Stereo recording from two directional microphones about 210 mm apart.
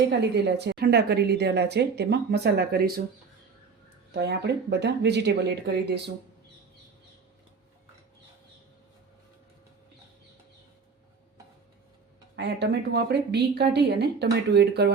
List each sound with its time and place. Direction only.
0.1 s a woman's voice: 55° right (ahead or behind)
4.1 s a woman's voice: 50° right (ahead or behind)
12.4 s a woman's voice: 50° right (ahead or behind)